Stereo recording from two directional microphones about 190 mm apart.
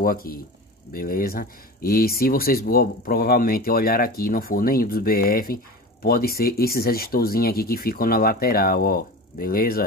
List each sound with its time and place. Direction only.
0.0 s speech: 50° left (ahead or behind)